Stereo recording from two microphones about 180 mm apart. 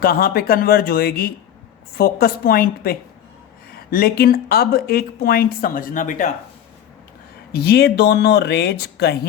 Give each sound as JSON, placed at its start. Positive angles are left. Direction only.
{"t": 0.0, "sound": "speech", "side_deg": 55}
{"t": 7.5, "sound": "speech", "side_deg": 60}